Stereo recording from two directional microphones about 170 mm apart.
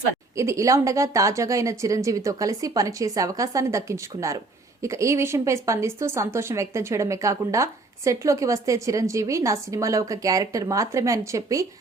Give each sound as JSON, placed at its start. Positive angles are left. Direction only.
{"t": 0.3, "sound": "a woman's voice", "side_deg": -20}